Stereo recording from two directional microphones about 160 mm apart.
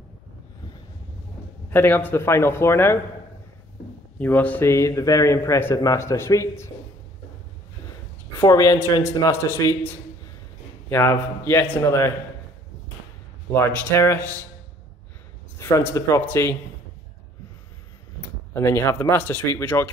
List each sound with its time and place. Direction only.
1.7 s speech: 15° left (ahead or behind)
4.2 s speech: 10° left (ahead or behind)
8.4 s a man's voice: 20° left (ahead or behind)
13.5 s speech: 15° left (ahead or behind)
15.5 s speech: 15° left (ahead or behind)
18.5 s speech: 15° left (ahead or behind)